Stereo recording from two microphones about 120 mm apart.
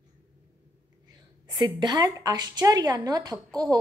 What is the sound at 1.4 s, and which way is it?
A woman's voice, 40° right (ahead or behind).